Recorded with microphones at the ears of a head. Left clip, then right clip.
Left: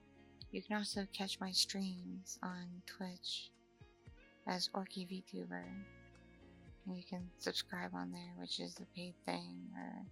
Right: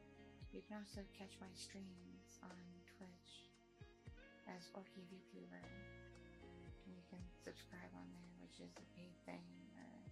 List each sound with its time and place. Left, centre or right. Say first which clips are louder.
0.3 s speech: left 14 dB; left